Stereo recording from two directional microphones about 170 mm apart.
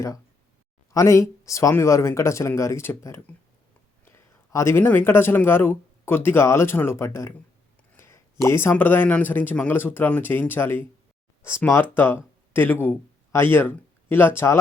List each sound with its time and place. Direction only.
0.9 s speech: 20° left (ahead or behind)
7.9 s a sound: 15° left (ahead or behind)
8.4 s speech: 15° left (ahead or behind)